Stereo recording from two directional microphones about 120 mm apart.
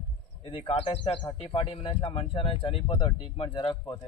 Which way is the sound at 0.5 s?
50° left (ahead or behind).